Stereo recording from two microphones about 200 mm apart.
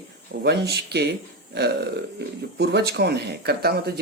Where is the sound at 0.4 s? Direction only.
55° right (ahead or behind).